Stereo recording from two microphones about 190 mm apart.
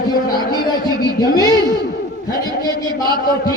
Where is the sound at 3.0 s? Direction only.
20° right (ahead or behind).